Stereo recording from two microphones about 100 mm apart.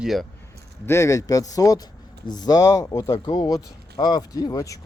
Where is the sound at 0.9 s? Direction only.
30° left (ahead or behind).